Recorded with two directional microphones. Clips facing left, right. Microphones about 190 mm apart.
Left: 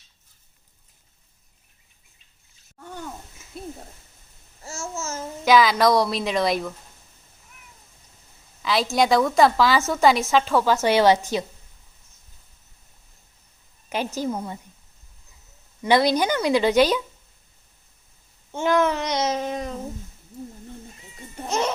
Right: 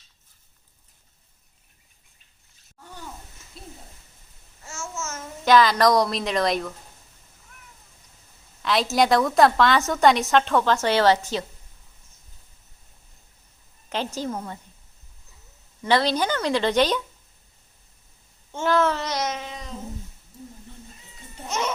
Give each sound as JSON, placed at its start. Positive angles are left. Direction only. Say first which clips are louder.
{"t": 3.6, "sound": "a sound", "louder": "left 9 dB", "side_deg": 55}
{"t": 4.6, "sound": "babbling", "louder": "left 2 dB", "side_deg": 35}
{"t": 5.5, "sound": "a woman's voice", "louder": "even", "side_deg": 5}
{"t": 8.6, "sound": "a woman's voice", "louder": "even", "side_deg": 0}
{"t": 14.2, "sound": "a woman's voice", "louder": "left 3 dB", "side_deg": 10}
{"t": 15.8, "sound": "a woman's voice", "louder": "left 3 dB", "side_deg": 15}
{"t": 18.5, "sound": "a woman's voice", "louder": "left 1 dB", "side_deg": 15}
{"t": 19.3, "sound": "child singing", "louder": "left 8 dB", "side_deg": 45}